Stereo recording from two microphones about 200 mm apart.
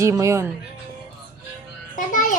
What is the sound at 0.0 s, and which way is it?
Dishes, 15° right (ahead or behind).